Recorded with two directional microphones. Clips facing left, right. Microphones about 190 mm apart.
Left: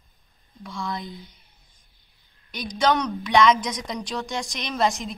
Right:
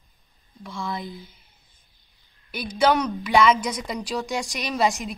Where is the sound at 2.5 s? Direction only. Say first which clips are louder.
Right 2 dB; 5° right (ahead or behind).